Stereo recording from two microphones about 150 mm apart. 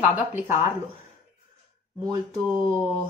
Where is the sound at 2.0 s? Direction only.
25° right (ahead or behind).